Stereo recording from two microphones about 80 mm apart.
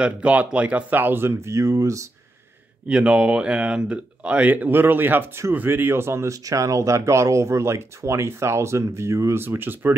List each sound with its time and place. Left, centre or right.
0.0 s speech: centre; by 2.0 s right
2.9 s speech: centre; by 9.4 s right
9.4 s speech: right